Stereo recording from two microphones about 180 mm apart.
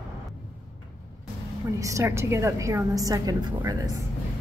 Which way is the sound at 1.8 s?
15° right (ahead or behind).